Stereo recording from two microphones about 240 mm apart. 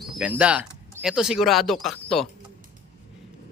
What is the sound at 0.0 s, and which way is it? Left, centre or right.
Speech, centre.